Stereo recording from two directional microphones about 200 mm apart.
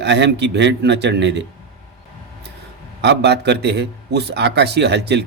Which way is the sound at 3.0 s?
60° right (ahead or behind).